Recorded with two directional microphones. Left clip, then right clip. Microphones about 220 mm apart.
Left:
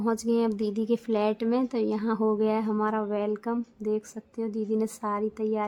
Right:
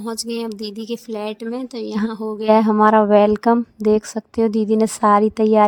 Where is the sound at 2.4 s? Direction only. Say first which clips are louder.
Right 12 dB; 40° right (ahead or behind).